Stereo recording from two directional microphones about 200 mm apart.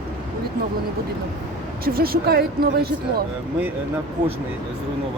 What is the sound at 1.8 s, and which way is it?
Speech, 50° right (ahead or behind).